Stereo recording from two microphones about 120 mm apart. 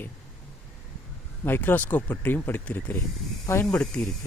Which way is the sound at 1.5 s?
15° left (ahead or behind).